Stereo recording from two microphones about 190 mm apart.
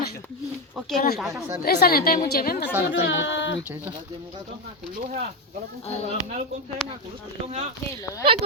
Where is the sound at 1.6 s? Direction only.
55° left (ahead or behind).